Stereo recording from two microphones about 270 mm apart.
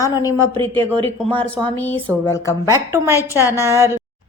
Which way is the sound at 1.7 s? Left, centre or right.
Centre.